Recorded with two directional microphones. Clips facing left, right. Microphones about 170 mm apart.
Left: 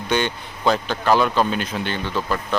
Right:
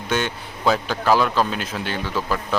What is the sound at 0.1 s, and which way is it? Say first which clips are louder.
Speech: left 2 dB; 5° right (ahead or behind).